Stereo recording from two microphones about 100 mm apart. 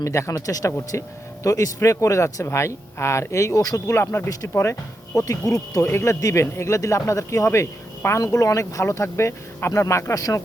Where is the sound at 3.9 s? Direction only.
25° left (ahead or behind).